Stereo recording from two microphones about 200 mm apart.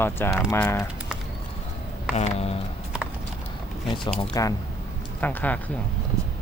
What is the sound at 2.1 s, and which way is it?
Speech, 30° left (ahead or behind).